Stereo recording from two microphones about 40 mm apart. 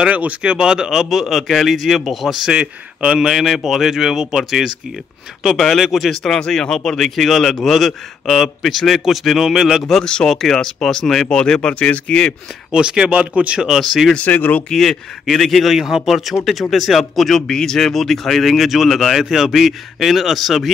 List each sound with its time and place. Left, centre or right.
0.0 s speech: right
0.4 s speech: right
1.1 s speech: centre
6.2 s speech: centre
10.2 s speech: centre
11.7 s speech: left
12.1 s speech: left
12.7 s speech: right
13.1 s speech: right
13.7 s speech: centre
14.3 s speech: left
14.7 s speech: centre
17.5 s speech: centre